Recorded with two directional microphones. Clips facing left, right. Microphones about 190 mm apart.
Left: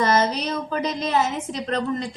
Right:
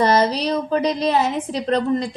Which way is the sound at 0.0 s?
35° right (ahead or behind).